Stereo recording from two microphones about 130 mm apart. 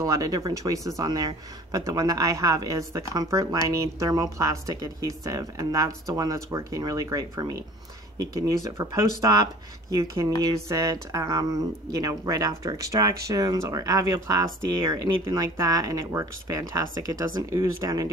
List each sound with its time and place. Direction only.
0.0 s speech: 30° right (ahead or behind)